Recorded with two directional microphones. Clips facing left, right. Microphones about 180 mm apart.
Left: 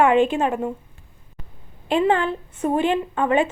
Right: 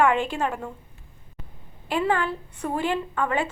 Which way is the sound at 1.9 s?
25° left (ahead or behind).